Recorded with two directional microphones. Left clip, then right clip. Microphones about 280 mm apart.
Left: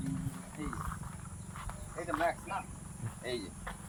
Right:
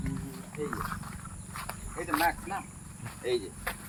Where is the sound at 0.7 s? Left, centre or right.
Right.